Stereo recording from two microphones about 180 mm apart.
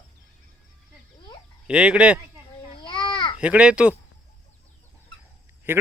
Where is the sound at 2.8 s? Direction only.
25° left (ahead or behind).